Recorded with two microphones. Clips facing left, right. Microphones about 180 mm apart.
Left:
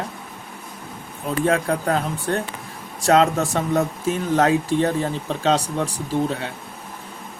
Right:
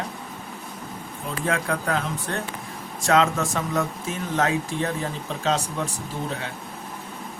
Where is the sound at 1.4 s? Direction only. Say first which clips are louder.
Left 5 dB; 35° left (ahead or behind).